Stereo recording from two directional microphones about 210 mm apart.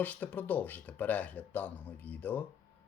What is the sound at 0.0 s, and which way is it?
Speech, 10° left (ahead or behind).